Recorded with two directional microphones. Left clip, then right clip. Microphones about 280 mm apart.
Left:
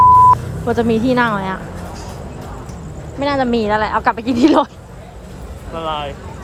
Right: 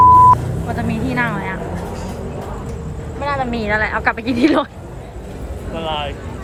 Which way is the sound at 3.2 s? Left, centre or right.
Left.